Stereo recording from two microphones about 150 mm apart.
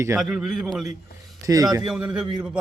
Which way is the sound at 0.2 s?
5° right (ahead or behind).